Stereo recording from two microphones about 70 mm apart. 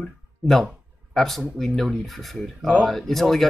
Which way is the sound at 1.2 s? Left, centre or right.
Centre.